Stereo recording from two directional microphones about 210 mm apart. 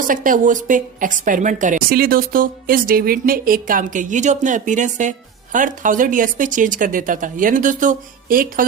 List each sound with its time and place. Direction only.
0.1 s a woman's voice: 40° right (ahead or behind)